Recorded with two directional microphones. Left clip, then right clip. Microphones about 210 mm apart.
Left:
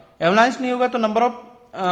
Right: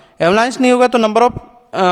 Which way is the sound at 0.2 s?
45° right (ahead or behind).